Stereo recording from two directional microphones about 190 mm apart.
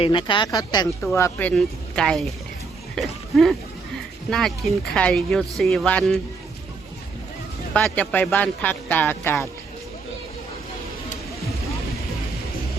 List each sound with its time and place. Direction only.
0.0 s speech: 25° left (ahead or behind); by 2.3 s centre (ahead or behind)
2.9 s a sound: centre (ahead or behind)
4.3 s speech: 5° left (ahead or behind)
7.7 s speech: 10° left (ahead or behind)